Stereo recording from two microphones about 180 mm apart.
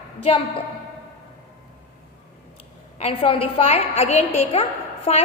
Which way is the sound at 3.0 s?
30° left (ahead or behind).